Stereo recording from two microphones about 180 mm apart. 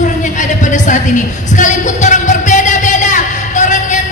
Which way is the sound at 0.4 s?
45° left (ahead or behind).